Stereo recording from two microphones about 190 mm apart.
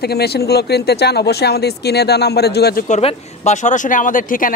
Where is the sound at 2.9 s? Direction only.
40° left (ahead or behind).